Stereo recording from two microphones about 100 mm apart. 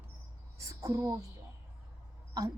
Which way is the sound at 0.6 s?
35° right (ahead or behind).